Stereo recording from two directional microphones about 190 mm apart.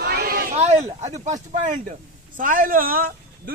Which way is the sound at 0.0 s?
55° right (ahead or behind).